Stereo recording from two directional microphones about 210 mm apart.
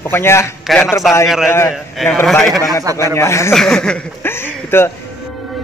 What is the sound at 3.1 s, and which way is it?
Speech, 15° left (ahead or behind).